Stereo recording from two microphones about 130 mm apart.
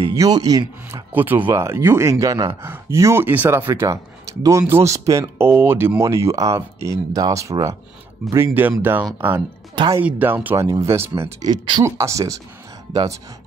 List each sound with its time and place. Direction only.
0.1 s speech: 30° right (ahead or behind)
1.1 s speech: 15° right (ahead or behind)
9.8 s speech: 40° right (ahead or behind)
10.0 s speech: 15° right (ahead or behind)
11.5 s speech: 40° right (ahead or behind)
11.8 s speech: 25° right (ahead or behind)